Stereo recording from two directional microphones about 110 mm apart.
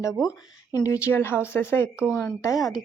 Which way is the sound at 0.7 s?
35° left (ahead or behind).